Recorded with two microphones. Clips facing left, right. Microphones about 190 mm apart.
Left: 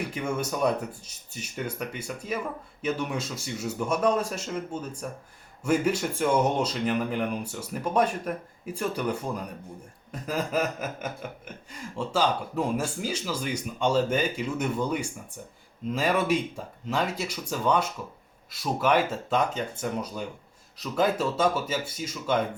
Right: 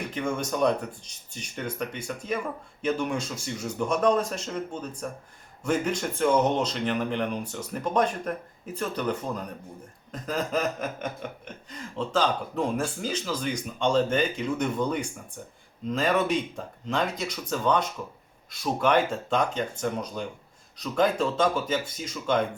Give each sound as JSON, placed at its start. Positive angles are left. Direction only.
{"t": 0.1, "sound": "chuckle", "side_deg": 10}
{"t": 18.5, "sound": "speech", "side_deg": 5}
{"t": 20.7, "sound": "chuckle", "side_deg": 5}